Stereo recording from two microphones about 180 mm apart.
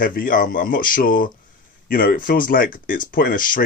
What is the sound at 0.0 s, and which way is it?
Speech, 50° left (ahead or behind).